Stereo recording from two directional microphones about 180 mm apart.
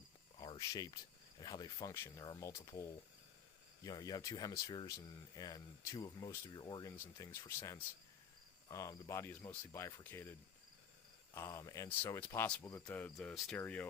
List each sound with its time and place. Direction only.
0.3 s cricket: 25° left (ahead or behind)
1.4 s speech: 25° left (ahead or behind)
3.8 s speech: 20° left (ahead or behind)
11.3 s speech: 15° left (ahead or behind)